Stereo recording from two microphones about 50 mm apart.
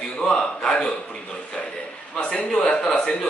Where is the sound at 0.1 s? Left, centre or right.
Centre.